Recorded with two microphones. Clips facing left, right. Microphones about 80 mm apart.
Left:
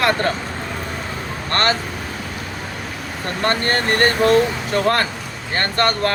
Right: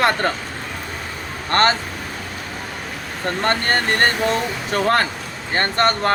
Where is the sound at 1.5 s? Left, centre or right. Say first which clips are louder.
Right 3 dB; right.